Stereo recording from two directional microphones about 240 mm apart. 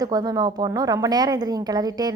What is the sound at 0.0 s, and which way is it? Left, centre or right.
A woman's voice, centre.